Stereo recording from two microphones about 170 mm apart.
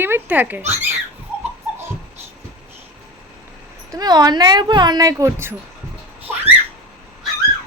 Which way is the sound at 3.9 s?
25° right (ahead or behind).